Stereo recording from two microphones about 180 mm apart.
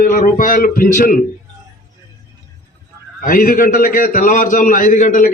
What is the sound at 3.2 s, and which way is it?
A man's voice, 50° left (ahead or behind).